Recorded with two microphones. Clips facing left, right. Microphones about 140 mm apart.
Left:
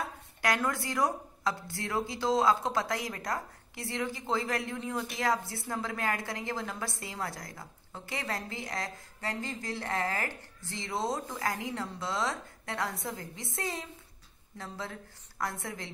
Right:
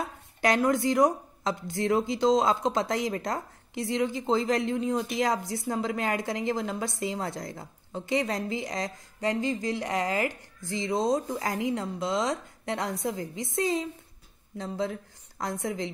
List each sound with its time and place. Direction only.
0.4 s a woman's voice: 20° right (ahead or behind)